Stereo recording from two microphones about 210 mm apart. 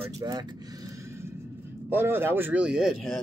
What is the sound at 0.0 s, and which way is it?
Speech, 20° right (ahead or behind).